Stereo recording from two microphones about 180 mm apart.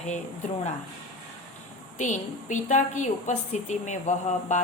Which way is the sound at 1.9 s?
45° left (ahead or behind).